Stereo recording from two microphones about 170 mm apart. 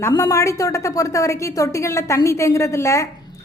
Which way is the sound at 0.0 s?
20° left (ahead or behind).